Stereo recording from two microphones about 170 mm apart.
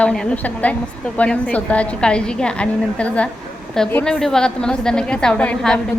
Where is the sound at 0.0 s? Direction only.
5° left (ahead or behind).